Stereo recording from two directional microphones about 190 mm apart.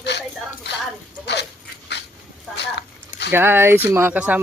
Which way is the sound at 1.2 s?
65° left (ahead or behind).